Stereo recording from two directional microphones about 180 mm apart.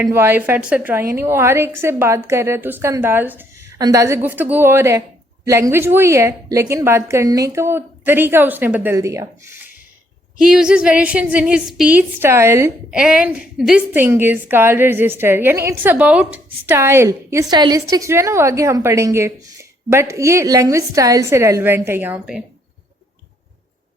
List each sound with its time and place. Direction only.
0.0 s a woman's voice: 10° right (ahead or behind)
10.4 s a woman's voice: 5° right (ahead or behind)